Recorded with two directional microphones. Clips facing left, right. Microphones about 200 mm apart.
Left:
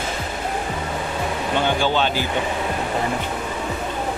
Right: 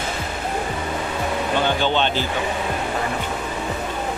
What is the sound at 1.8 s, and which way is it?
Speech, 10° left (ahead or behind).